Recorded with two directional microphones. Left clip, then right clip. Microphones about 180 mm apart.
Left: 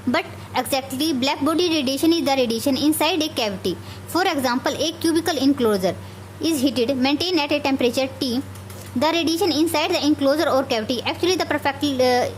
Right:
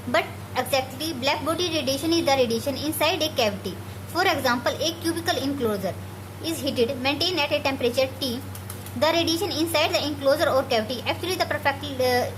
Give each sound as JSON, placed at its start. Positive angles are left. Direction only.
{"t": 0.1, "sound": "a woman's voice", "side_deg": 45}